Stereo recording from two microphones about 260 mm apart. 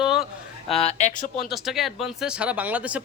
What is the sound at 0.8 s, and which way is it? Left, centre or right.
Speech, left.